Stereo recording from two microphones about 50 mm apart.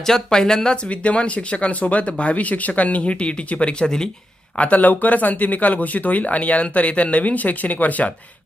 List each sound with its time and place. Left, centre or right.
0.0 s speech: centre
0.9 s speech: left
4.5 s speech: left